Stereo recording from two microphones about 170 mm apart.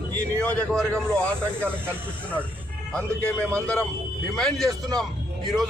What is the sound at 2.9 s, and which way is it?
Speech, 5° left (ahead or behind).